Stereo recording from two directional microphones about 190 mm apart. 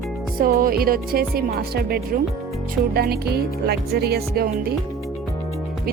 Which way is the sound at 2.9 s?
55° right (ahead or behind).